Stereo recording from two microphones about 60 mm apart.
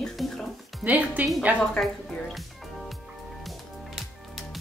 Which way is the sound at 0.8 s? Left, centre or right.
Right.